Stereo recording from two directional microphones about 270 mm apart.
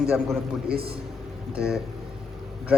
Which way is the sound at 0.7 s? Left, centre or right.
Right.